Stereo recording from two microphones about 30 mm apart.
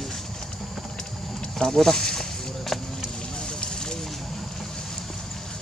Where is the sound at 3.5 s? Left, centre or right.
Left.